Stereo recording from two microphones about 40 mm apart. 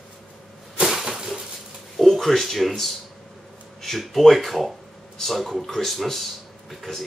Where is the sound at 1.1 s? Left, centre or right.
Centre.